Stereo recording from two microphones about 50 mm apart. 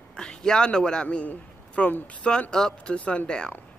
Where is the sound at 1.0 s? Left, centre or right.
Left.